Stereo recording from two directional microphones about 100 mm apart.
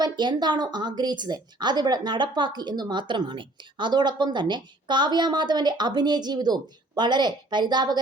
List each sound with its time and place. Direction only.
0.0 s a woman's voice: 45° right (ahead or behind)